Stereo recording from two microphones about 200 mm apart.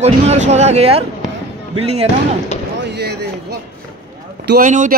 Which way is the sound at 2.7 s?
60° right (ahead or behind).